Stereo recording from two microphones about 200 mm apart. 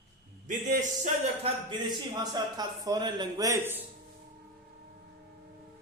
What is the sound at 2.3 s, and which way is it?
A man's voice, 20° right (ahead or behind).